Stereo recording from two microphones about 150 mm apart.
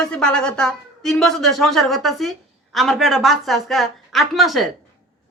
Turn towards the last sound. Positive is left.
turn(degrees=0)  # may be behind; listen again after turning